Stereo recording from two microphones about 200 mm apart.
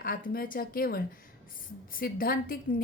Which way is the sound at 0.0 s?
45° left (ahead or behind).